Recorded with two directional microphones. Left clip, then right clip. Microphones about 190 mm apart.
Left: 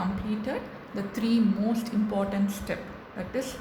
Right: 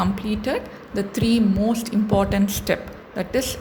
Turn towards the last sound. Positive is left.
turn(degrees=-45)  # may be behind; listen again after turning